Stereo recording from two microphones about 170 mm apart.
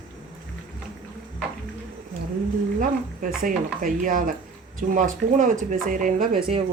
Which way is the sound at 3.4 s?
55° right (ahead or behind).